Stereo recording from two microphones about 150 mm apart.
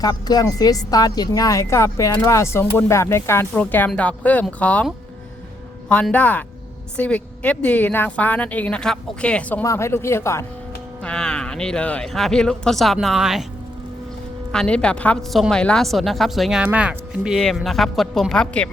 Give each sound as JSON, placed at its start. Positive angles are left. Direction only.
{"t": 0.0, "sound": "a woman's voice", "side_deg": 25}
{"t": 5.9, "sound": "speech", "side_deg": 10}
{"t": 11.0, "sound": "a woman's voice", "side_deg": 5}
{"t": 14.5, "sound": "a woman's voice", "side_deg": 5}